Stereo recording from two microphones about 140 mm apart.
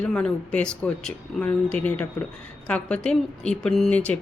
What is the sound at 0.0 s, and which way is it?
A woman's voice, 10° left (ahead or behind).